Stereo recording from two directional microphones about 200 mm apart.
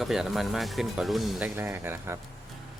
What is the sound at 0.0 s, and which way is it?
Speech, centre (ahead or behind).